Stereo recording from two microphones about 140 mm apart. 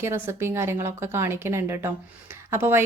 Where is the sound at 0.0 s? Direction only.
20° right (ahead or behind).